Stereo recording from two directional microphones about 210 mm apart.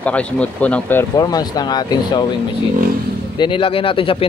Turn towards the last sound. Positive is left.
turn(degrees=25)  # may be behind; listen again after turning